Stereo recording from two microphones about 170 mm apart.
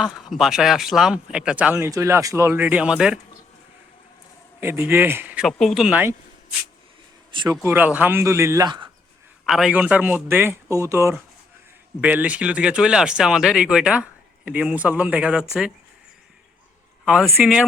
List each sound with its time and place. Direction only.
0.0 s speech: 5° right (ahead or behind)
4.6 s speech: 15° right (ahead or behind)
7.3 s speech: 25° right (ahead or behind)
9.5 s speech: 5° right (ahead or behind)
17.1 s speech: centre (ahead or behind)